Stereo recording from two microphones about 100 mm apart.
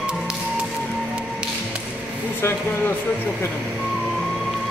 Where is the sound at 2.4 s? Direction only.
25° left (ahead or behind).